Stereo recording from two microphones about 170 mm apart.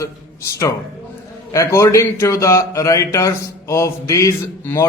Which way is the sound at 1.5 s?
20° left (ahead or behind).